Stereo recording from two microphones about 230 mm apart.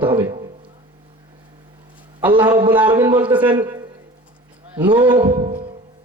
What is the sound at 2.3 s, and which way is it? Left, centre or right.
Speech, right.